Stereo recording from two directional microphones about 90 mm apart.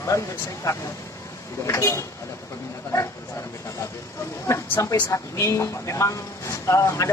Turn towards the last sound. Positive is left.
turn(degrees=35)  # may be behind; listen again after turning